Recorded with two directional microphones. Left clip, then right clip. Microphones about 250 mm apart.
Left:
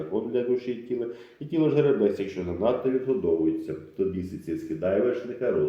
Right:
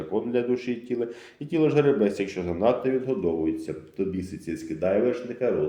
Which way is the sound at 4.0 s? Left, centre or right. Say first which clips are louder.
Left 2 dB; right.